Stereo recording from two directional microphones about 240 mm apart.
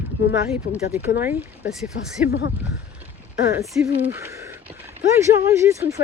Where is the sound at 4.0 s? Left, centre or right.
Centre.